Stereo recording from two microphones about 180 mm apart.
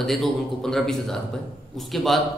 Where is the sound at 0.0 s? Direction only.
Centre (ahead or behind).